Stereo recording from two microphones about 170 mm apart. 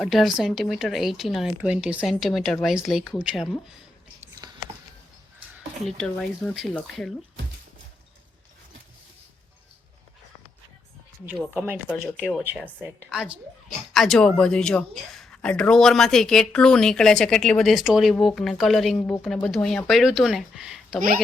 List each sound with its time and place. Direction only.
0.0 s speech: centre (ahead or behind)
4.4 s whispering: 25° right (ahead or behind)
6.0 s speech: 5° left (ahead or behind)
11.3 s speech: 10° right (ahead or behind)
12.0 s speech: 10° left (ahead or behind)
12.8 s speech: 5° right (ahead or behind)